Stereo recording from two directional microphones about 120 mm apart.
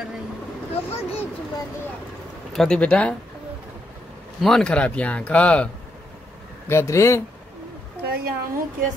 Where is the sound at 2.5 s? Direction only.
5° left (ahead or behind).